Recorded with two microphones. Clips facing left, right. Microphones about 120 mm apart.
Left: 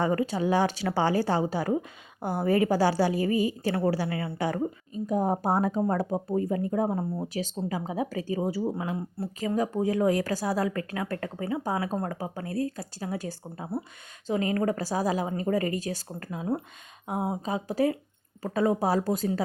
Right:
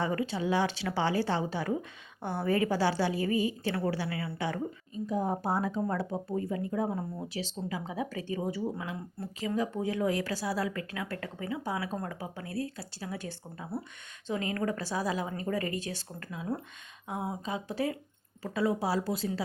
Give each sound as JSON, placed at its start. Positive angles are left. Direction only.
{"t": 0.0, "sound": "a woman's voice", "side_deg": 40}
{"t": 4.4, "sound": "a woman's voice", "side_deg": 40}
{"t": 17.4, "sound": "a woman's voice", "side_deg": 40}